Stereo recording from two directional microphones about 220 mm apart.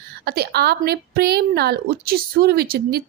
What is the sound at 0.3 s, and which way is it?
A woman's voice, 45° right (ahead or behind).